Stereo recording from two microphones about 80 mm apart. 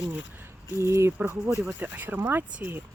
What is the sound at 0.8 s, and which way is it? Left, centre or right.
Speech, right.